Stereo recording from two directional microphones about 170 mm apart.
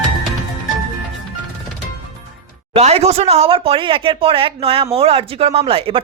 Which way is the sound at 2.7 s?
40° right (ahead or behind).